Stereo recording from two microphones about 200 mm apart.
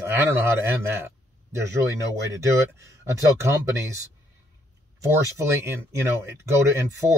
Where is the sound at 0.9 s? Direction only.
15° right (ahead or behind).